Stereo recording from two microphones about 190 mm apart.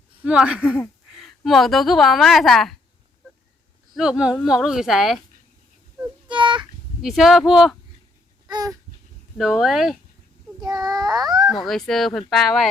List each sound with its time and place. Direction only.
0.2 s a woman's voice: 5° right (ahead or behind)
3.9 s a woman's voice: 5° right (ahead or behind)
6.2 s a sound: 25° right (ahead or behind)
6.6 s speech: centre (ahead or behind)
8.4 s a sound: 20° right (ahead or behind)
9.4 s a woman's voice: centre (ahead or behind)
10.6 s child singing: 20° right (ahead or behind)
11.4 s a woman's voice: centre (ahead or behind)